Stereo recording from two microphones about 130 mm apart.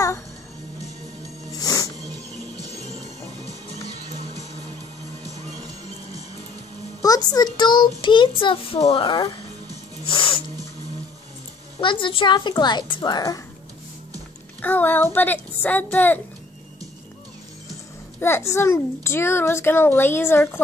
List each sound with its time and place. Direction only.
1.5 s music: 25° left (ahead or behind)
7.0 s a child's voice: 30° left (ahead or behind)
11.8 s a woman's voice: 40° left (ahead or behind)
14.6 s speech: 15° left (ahead or behind)
18.2 s a woman's voice: 20° left (ahead or behind)